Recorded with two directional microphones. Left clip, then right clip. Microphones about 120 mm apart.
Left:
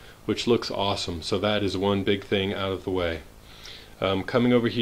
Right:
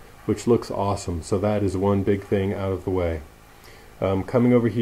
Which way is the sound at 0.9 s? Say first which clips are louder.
Left 1 dB; 10° right (ahead or behind).